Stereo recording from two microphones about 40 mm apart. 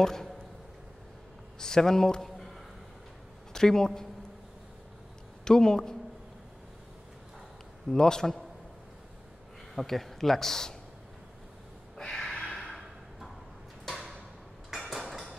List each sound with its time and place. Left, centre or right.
0.0 s a man's voice: centre
1.6 s a man's voice: centre
2.2 s music: centre
3.5 s a man's voice: centre
5.4 s a man's voice: centre
7.9 s a man's voice: centre
9.8 s a man's voice: centre
12.1 s a sound: centre
13.8 s tick-tock: centre
14.9 s mechanisms: centre